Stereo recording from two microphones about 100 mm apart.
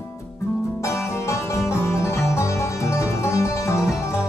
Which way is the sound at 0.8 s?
30° left (ahead or behind).